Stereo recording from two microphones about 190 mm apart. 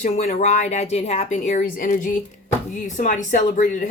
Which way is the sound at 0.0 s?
40° left (ahead or behind).